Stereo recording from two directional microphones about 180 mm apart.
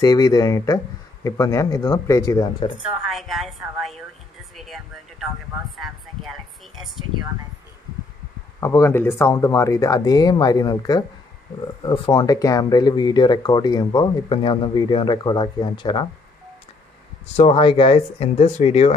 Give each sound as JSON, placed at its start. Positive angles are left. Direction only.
{"t": 0.0, "sound": "speech", "side_deg": 20}
{"t": 2.8, "sound": "a woman's voice", "side_deg": -5}
{"t": 4.6, "sound": "a sound", "side_deg": 0}
{"t": 8.5, "sound": "speech", "side_deg": 15}
{"t": 17.4, "sound": "speech", "side_deg": 30}